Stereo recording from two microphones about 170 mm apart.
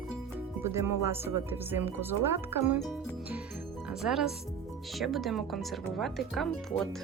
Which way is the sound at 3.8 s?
5° right (ahead or behind).